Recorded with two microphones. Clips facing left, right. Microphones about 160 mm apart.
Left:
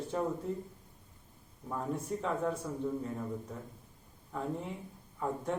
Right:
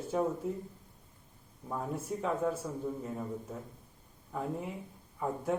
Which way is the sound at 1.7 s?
5° right (ahead or behind).